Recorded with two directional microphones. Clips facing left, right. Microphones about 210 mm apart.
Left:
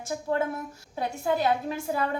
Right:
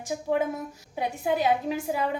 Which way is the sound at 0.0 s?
15° right (ahead or behind).